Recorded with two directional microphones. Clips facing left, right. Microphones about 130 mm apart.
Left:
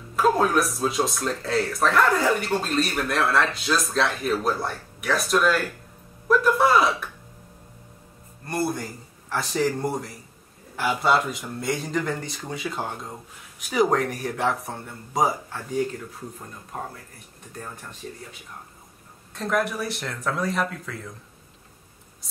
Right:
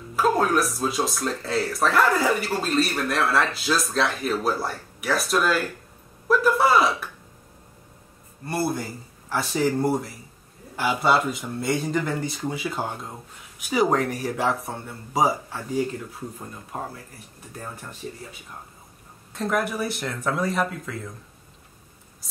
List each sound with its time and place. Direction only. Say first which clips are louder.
0.1 s speech: left 1 dB; centre (ahead or behind)
8.5 s speech: right 1 dB; 5° right (ahead or behind)
19.3 s speech: even; centre (ahead or behind)